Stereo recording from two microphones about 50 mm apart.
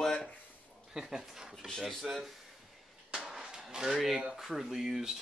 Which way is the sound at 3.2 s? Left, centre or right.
Centre.